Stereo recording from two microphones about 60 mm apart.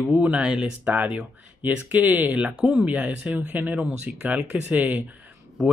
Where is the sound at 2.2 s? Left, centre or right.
Centre.